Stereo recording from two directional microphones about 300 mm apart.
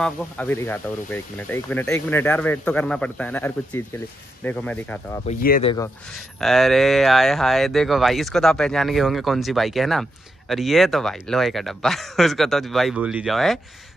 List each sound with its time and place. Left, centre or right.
0.0 s speech: centre
5.2 s speech: left
6.4 s speech: centre